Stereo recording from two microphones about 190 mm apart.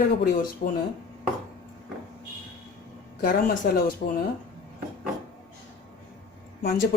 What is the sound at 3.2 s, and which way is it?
Speech, 50° left (ahead or behind).